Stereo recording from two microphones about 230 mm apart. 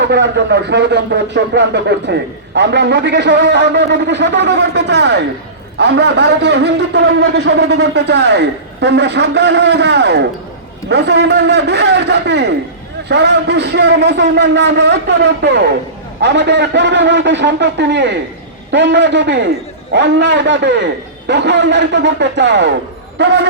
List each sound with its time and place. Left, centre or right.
0.0 s a man's voice: right